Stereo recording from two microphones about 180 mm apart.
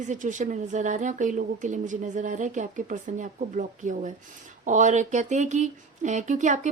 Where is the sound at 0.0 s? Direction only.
45° right (ahead or behind).